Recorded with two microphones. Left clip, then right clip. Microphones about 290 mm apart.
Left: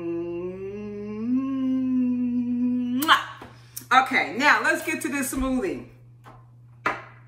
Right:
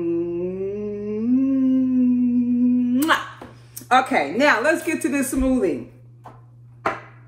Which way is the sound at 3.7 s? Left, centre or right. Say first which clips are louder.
Right 2 dB; centre.